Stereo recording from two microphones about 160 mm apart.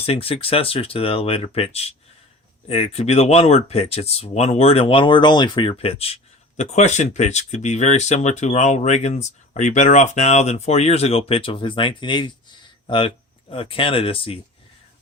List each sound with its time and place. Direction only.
0.0 s speech: 35° left (ahead or behind)